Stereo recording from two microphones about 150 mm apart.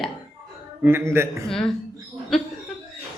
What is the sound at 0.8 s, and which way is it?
Speech, 15° right (ahead or behind).